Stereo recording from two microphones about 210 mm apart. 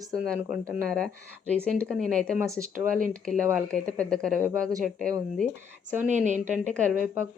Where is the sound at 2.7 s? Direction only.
40° right (ahead or behind).